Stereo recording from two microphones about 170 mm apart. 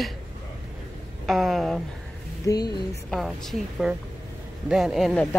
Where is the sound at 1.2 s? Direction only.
Centre (ahead or behind).